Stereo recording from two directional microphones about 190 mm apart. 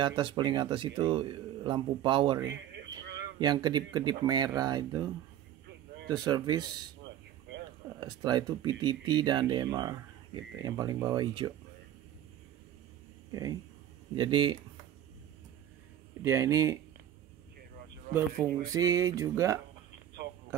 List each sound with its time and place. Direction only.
0.0 s speech: 25° right (ahead or behind)
2.5 s a sound: 70° right (ahead or behind)
3.3 s speech: 25° right (ahead or behind)
8.0 s speech: 20° right (ahead or behind)
13.3 s speech: 20° right (ahead or behind)
16.2 s music: 15° right (ahead or behind)
18.7 s music: 20° right (ahead or behind)